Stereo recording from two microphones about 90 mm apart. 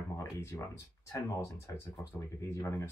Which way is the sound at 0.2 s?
30° left (ahead or behind).